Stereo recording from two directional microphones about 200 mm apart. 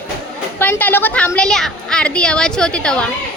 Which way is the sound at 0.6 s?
10° left (ahead or behind).